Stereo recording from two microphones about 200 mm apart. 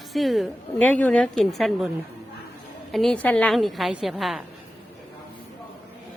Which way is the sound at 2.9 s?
Centre (ahead or behind).